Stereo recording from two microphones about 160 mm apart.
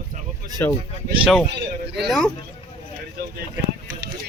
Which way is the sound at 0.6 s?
15° left (ahead or behind).